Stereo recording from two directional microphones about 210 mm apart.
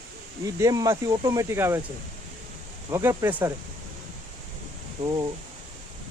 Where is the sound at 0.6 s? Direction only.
15° right (ahead or behind).